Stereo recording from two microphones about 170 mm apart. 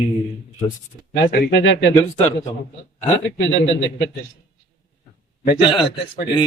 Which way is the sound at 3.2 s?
90° left.